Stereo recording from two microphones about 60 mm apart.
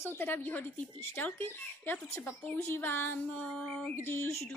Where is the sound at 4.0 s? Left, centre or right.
Left.